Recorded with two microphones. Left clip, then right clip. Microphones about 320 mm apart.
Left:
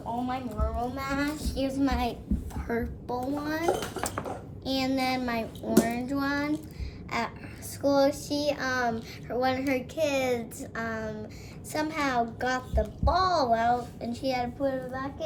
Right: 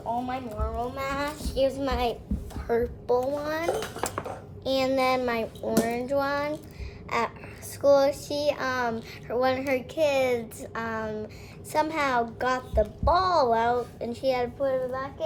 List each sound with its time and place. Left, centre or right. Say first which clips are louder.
0.3 s a child's voice: right 1 dB; centre